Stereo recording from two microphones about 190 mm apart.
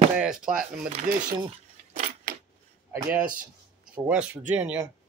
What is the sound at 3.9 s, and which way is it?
Speech, 5° right (ahead or behind).